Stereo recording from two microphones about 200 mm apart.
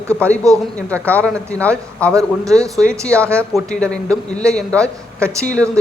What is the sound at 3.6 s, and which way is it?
A man's voice, 5° left (ahead or behind).